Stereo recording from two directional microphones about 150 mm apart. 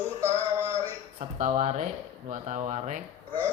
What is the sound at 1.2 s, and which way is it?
Speech, 55° right (ahead or behind).